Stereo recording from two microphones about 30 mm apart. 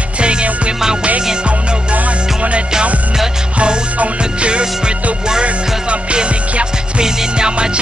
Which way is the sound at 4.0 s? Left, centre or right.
Right.